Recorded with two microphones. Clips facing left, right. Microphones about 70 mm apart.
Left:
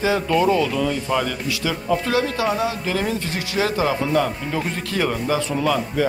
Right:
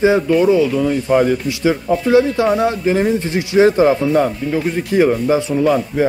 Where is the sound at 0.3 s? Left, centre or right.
Centre.